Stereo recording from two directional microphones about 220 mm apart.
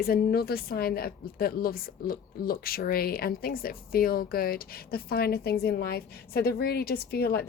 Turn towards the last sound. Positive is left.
turn(degrees=45)  # may be behind; listen again after turning